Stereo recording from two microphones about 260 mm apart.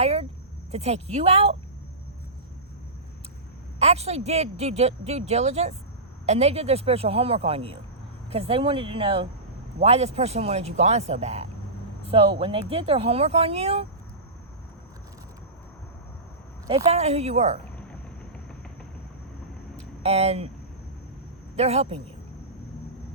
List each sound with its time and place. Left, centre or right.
0.0 s speech: right
3.8 s speech: right
16.6 s speech: right
20.0 s speech: right
21.5 s speech: right